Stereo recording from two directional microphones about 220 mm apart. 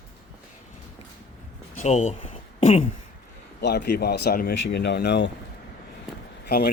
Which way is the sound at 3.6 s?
45° left (ahead or behind).